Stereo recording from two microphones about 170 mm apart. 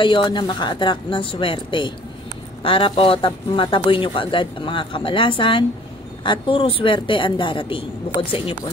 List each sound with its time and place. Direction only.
0.0 s a woman's voice: 30° left (ahead or behind)